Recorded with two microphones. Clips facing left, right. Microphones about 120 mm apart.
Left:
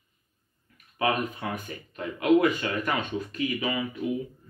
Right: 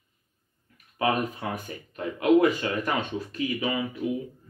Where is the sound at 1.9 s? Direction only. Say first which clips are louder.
Right 1 dB; 30° right (ahead or behind).